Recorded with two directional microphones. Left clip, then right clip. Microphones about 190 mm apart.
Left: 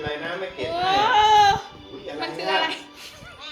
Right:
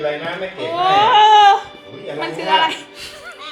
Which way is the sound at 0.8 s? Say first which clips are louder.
Right 7 dB; centre (ahead or behind).